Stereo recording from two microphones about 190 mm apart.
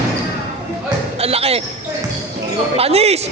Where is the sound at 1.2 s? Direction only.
30° right (ahead or behind).